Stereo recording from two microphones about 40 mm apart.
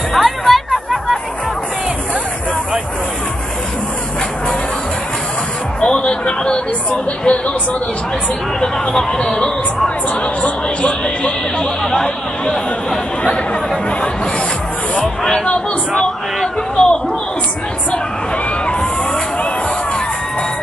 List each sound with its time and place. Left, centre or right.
0.2 s music: centre
5.8 s music: left
8.5 s speech: centre
10.4 s speech: left
11.8 s speech: centre
15.9 s speech: centre
16.7 s a sound: left